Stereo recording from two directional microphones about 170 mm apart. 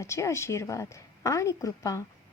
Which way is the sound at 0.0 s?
15° left (ahead or behind).